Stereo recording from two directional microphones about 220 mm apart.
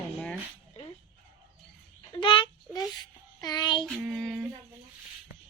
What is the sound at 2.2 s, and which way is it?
Child singing, 20° left (ahead or behind).